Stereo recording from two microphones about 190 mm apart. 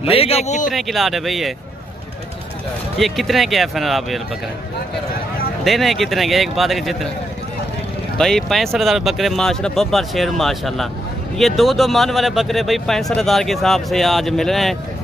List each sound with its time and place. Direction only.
0.0 s speech: 30° left (ahead or behind)
0.7 s speech: centre (ahead or behind)
3.0 s speech: centre (ahead or behind)
5.6 s speech: centre (ahead or behind)
8.2 s speech: centre (ahead or behind)